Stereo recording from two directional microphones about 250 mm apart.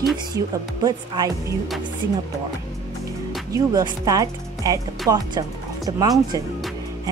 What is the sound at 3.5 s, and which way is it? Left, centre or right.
Speech, centre.